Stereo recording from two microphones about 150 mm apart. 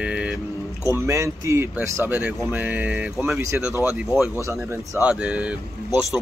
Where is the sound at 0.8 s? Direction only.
20° right (ahead or behind).